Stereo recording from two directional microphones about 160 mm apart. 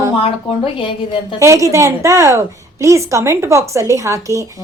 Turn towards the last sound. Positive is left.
turn(degrees=-20)  # may be behind; listen again after turning